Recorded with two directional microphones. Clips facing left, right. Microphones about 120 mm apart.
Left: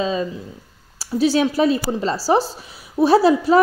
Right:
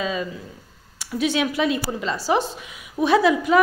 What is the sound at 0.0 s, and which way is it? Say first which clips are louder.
A woman's voice: left 4 dB; 30° left (ahead or behind).